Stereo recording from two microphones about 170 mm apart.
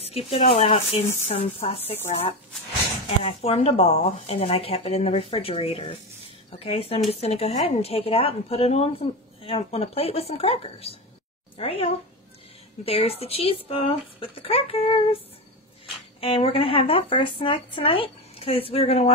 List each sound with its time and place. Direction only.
0.0 s a woman's voice: 35° left (ahead or behind)
16.2 s a woman's voice: 35° left (ahead or behind)